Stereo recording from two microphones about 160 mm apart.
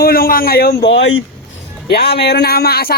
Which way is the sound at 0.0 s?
65° left (ahead or behind).